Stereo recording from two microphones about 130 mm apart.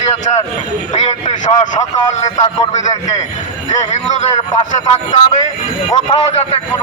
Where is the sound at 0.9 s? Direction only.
65° left (ahead or behind).